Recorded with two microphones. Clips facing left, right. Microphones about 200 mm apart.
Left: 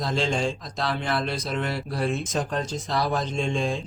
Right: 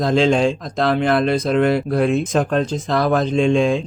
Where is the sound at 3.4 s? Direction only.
90° right.